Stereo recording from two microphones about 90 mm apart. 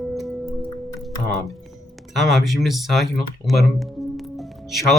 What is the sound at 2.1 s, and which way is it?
Speech, centre (ahead or behind).